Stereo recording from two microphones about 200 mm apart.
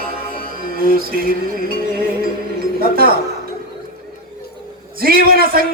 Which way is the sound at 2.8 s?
50° right (ahead or behind).